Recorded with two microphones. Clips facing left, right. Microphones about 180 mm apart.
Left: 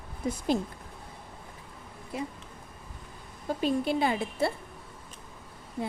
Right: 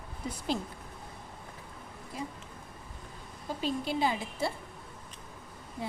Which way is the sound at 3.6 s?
55° left (ahead or behind).